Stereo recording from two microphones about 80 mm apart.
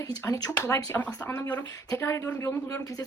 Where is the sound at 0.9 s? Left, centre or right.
Centre.